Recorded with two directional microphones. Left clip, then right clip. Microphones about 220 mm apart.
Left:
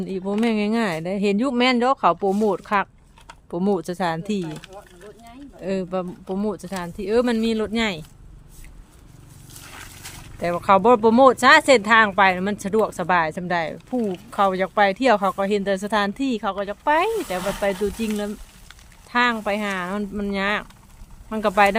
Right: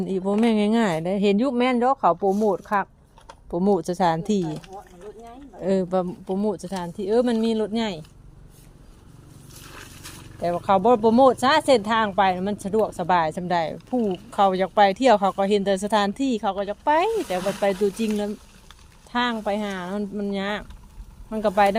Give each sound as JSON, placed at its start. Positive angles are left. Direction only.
{"t": 0.0, "sound": "speech", "side_deg": -5}
{"t": 1.5, "sound": "speech", "side_deg": 10}
{"t": 4.4, "sound": "speech", "side_deg": 45}
{"t": 5.6, "sound": "speech", "side_deg": -10}
{"t": 6.2, "sound": "speech", "side_deg": 5}
{"t": 10.4, "sound": "speech", "side_deg": 15}